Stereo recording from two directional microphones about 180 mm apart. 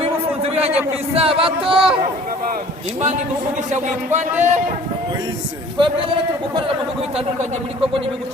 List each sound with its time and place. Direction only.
0.0 s a sound: 35° right (ahead or behind)
1.1 s speech: 30° right (ahead or behind)
3.7 s speech: 40° right (ahead or behind)
5.7 s a man's voice: 25° right (ahead or behind)